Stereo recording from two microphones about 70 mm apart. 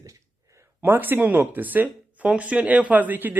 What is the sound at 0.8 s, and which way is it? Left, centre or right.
Speech, right.